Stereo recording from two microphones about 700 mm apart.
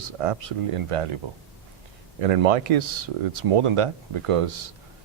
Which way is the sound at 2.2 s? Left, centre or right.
Right.